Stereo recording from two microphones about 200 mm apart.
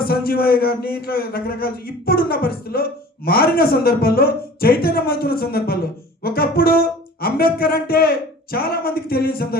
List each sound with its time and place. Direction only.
0.0 s speech: 50° left (ahead or behind)